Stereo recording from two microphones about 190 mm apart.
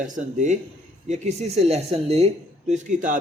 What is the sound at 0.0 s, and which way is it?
A man's voice, 40° right (ahead or behind).